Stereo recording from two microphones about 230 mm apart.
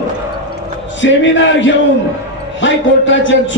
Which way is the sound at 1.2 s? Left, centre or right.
Left.